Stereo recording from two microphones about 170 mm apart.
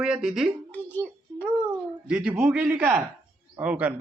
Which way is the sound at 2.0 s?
5° right (ahead or behind).